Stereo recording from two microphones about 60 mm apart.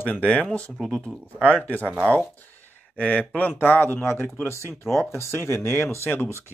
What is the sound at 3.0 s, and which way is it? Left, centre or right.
Speech, left.